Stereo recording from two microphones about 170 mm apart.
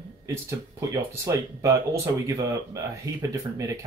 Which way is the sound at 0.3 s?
15° right (ahead or behind).